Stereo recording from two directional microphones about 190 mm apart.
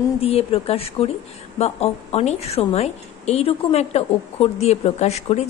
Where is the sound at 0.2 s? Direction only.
30° left (ahead or behind).